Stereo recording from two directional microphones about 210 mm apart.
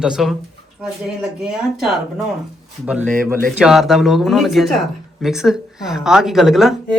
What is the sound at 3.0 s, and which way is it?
Speech, 40° right (ahead or behind).